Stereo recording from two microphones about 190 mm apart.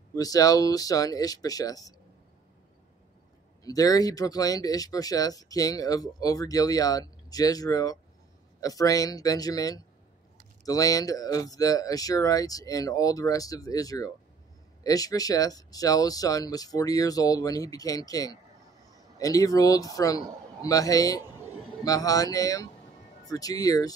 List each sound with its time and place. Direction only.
0.1 s speech: 20° left (ahead or behind)
3.6 s speech: 20° left (ahead or behind)